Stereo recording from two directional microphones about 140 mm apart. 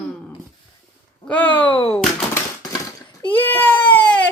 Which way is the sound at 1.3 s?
10° left (ahead or behind).